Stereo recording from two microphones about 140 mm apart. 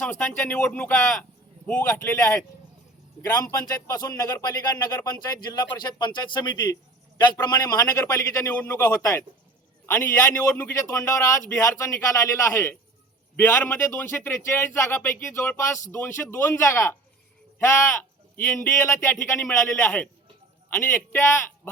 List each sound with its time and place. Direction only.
0.0 s a man's voice: 10° left (ahead or behind)